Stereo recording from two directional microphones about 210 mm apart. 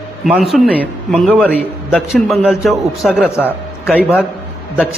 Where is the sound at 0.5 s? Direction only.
Centre (ahead or behind).